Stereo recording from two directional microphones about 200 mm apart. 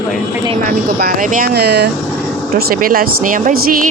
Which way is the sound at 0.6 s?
45° right (ahead or behind).